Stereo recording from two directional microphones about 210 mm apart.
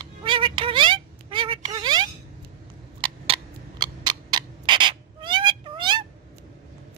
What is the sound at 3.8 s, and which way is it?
Owl, 20° right (ahead or behind).